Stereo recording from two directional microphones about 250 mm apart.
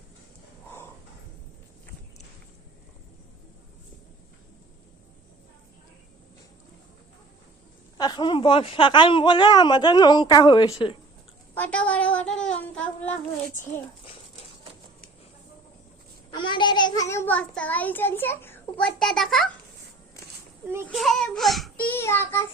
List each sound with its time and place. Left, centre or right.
7.9 s a child's voice: centre
11.5 s child singing: centre
16.3 s a child's voice: centre
20.8 s a child's voice: centre